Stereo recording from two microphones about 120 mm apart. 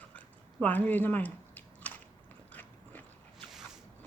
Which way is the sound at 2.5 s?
15° left (ahead or behind).